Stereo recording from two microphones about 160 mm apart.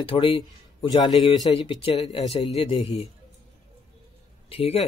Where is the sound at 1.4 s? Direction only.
30° left (ahead or behind).